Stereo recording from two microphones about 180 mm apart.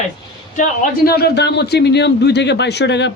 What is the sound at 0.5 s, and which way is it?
A man's voice, 50° left (ahead or behind).